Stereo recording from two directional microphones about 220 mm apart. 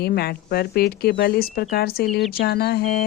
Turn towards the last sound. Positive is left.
turn(degrees=45)  # may be behind; listen again after turning